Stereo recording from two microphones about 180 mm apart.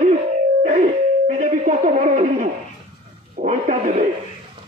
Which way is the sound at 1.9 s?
40° right (ahead or behind).